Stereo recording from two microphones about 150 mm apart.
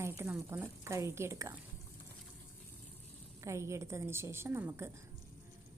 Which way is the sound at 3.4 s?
20° right (ahead or behind).